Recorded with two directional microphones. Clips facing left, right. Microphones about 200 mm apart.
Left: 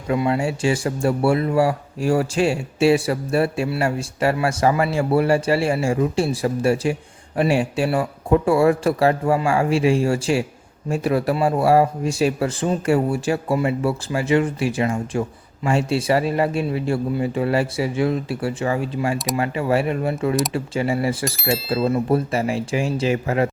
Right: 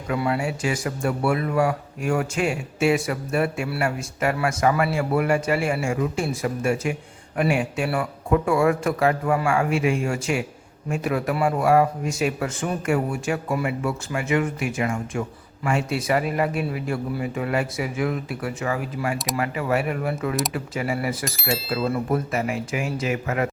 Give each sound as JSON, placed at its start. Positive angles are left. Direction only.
{"t": 0.1, "sound": "a man's voice", "side_deg": 25}
{"t": 21.2, "sound": "speech", "side_deg": 0}
{"t": 21.8, "sound": "a man's voice", "side_deg": 25}